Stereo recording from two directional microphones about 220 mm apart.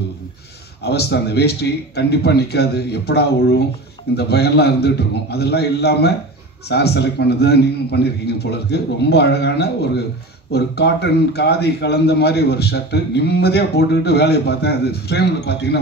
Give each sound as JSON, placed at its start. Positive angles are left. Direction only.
{"t": 0.8, "sound": "a man's voice", "side_deg": 45}